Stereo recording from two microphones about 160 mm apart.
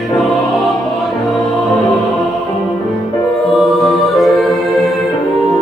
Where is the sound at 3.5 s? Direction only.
Centre (ahead or behind).